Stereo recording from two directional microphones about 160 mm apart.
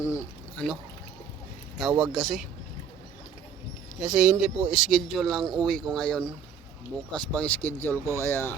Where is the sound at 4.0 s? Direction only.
5° right (ahead or behind); by 8.5 s 15° left (ahead or behind).